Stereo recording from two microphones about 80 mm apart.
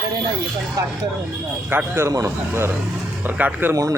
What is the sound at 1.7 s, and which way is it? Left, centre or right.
Speech, right.